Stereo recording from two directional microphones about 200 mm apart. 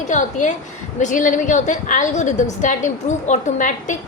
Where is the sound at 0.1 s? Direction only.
40° left (ahead or behind).